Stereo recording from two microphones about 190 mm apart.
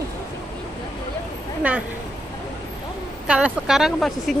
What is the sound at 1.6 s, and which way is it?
Speech, 5° right (ahead or behind).